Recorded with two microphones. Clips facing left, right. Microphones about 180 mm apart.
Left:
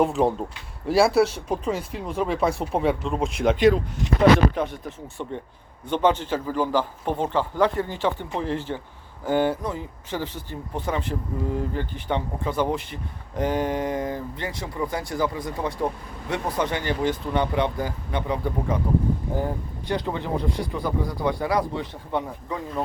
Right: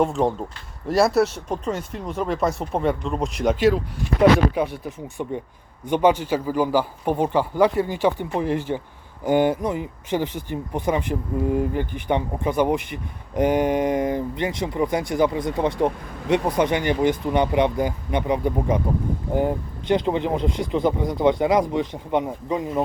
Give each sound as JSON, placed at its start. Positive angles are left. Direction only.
{"t": 0.0, "sound": "speech", "side_deg": 0}
{"t": 19.9, "sound": "speech", "side_deg": -20}